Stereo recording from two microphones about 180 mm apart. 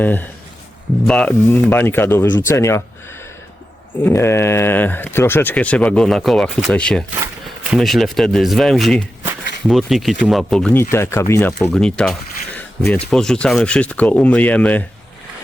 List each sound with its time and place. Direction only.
0.0 s a man's voice: 10° left (ahead or behind)
12.5 s a sound: 5° left (ahead or behind)
13.1 s speech: 5° left (ahead or behind)